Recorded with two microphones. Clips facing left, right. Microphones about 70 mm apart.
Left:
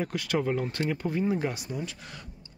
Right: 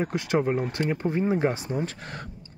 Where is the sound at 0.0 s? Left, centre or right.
Right.